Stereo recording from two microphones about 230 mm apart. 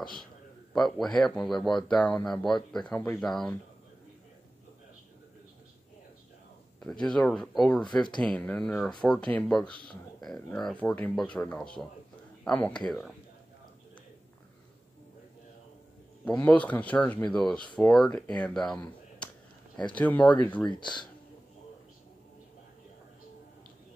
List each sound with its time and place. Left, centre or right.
0.0 s a man's voice: centre
6.8 s speech: centre
16.3 s speech: centre
20.7 s speech: centre